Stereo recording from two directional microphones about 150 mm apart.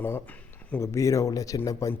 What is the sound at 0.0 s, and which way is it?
Speech, 10° left (ahead or behind).